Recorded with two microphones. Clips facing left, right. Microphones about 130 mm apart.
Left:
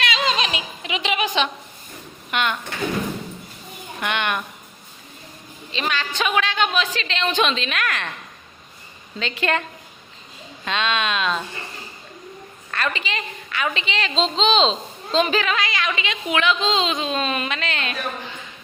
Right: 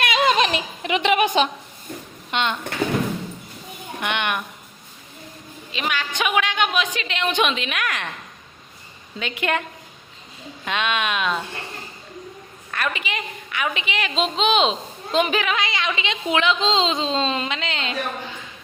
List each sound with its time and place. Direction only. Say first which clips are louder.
0.0 s a sound: right 4 dB; 55° right (ahead or behind)
2.3 s a woman's voice: even; 25° right (ahead or behind)
4.0 s a woman's voice: left 1 dB; 15° right (ahead or behind)
5.7 s a woman's voice: left 1 dB; 10° right (ahead or behind)
9.1 s a woman's voice: left 1 dB; 15° right (ahead or behind)
10.7 s a woman's voice: left 1 dB; 15° right (ahead or behind)
12.7 s a woman's voice: left 1 dB; 10° right (ahead or behind)